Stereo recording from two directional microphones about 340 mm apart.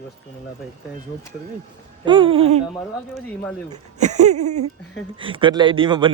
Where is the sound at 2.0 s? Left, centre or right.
Centre.